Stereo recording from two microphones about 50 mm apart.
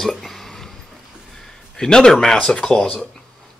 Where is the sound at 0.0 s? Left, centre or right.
Centre.